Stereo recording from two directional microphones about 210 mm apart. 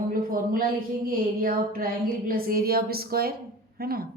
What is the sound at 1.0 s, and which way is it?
A woman's voice, 40° right (ahead or behind).